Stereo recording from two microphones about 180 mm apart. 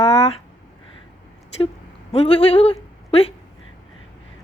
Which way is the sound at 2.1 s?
35° left (ahead or behind).